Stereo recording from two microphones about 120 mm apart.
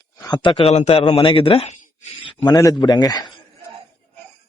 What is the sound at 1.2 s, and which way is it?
Speech, 45° left (ahead or behind).